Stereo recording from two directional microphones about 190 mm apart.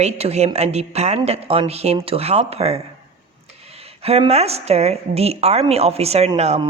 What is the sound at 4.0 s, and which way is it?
A woman's voice, 30° right (ahead or behind).